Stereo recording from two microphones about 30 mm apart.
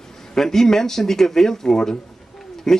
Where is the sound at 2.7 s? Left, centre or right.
Centre.